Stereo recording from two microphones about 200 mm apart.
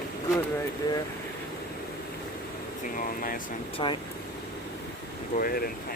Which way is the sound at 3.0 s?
45° left (ahead or behind).